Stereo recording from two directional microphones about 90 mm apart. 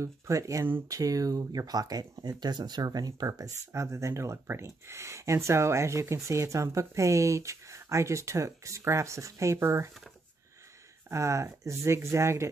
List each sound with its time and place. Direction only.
0.0 s speech: 35° right (ahead or behind)
11.1 s speech: 35° right (ahead or behind)